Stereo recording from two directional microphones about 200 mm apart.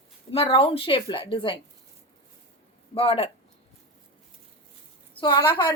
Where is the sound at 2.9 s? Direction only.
30° left (ahead or behind).